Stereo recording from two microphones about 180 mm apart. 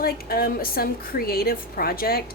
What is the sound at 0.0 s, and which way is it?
Speech, 55° left (ahead or behind).